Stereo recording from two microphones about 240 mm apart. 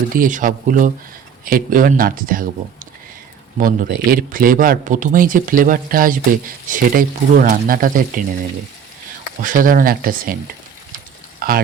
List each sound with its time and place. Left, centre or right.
0.1 s speech: right
3.6 s speech: right
9.4 s speech: right
11.3 s a sound: right